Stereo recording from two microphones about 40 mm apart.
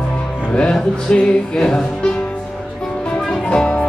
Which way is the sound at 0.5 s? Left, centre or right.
Left.